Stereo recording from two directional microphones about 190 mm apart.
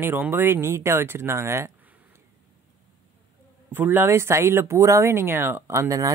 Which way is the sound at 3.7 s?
10° right (ahead or behind).